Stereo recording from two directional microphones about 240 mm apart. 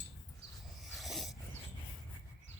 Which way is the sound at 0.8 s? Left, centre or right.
Centre.